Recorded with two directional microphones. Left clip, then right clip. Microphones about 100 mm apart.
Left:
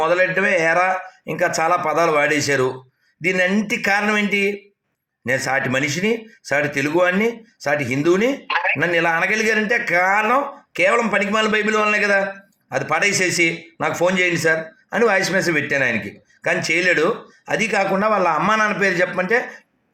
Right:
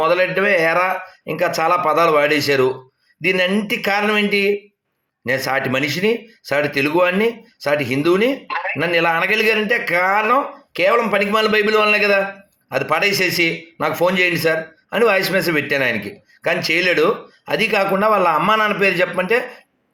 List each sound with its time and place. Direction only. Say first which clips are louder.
0.0 s a man's voice: right 1 dB; centre (ahead or behind)
8.4 s a sound: left 3 dB; 25° left (ahead or behind)
8.8 s a man's voice: right 6 dB; centre (ahead or behind)